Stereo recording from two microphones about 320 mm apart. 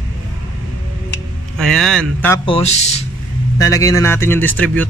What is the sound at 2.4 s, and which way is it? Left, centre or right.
A man's voice, centre.